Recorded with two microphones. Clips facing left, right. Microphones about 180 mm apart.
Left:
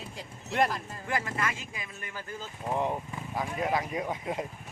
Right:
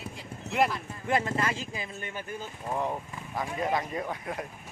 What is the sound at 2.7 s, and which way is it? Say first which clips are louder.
Speech: left 1 dB; 15° left (ahead or behind).